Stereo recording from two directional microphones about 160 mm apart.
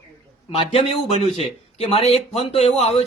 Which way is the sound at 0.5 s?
35° left (ahead or behind).